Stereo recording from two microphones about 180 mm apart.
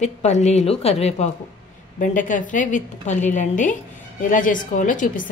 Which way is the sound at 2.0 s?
45° left (ahead or behind).